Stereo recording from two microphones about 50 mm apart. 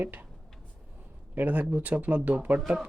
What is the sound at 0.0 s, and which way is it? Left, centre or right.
Speech, right.